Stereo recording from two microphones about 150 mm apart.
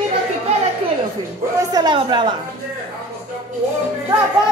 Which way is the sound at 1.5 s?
25° right (ahead or behind).